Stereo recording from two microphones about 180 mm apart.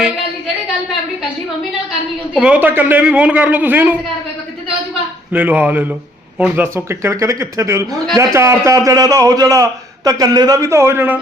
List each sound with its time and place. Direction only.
2.3 s speech: 5° right (ahead or behind)
5.3 s a man's voice: 10° right (ahead or behind)